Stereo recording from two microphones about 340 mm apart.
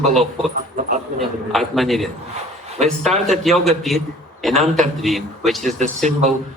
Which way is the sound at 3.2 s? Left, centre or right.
Centre.